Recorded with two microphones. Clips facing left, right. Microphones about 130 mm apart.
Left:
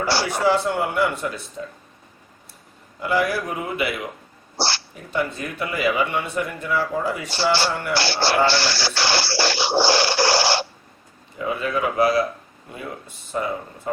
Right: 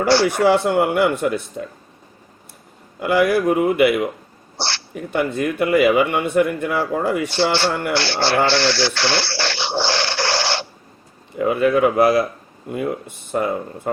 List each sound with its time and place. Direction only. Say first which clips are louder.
0.3 s speech: right 4 dB; 60° right (ahead or behind)
3.0 s speech: right 6 dB; 60° right (ahead or behind)
4.5 s speech: left 2 dB; 10° left (ahead or behind)
4.9 s speech: right 7 dB; 60° right (ahead or behind)
7.9 s speech: right 2 dB; 10° left (ahead or behind)
8.4 s a sound: right 4 dB; 10° left (ahead or behind)
11.3 s speech: right 8 dB; 60° right (ahead or behind)